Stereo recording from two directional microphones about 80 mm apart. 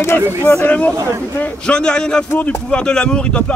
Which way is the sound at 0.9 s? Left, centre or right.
Right.